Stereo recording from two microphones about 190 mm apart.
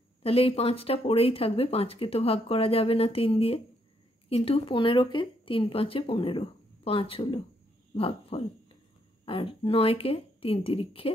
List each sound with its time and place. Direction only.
0.2 s speech: 30° left (ahead or behind)